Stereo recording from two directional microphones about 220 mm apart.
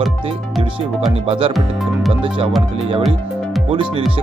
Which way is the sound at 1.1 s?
25° right (ahead or behind).